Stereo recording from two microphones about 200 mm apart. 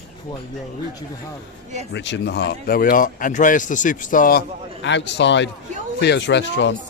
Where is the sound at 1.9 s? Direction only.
65° left (ahead or behind); by 4.4 s 45° left (ahead or behind).